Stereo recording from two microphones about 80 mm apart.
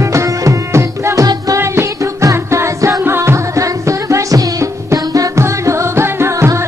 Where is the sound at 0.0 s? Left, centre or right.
Right.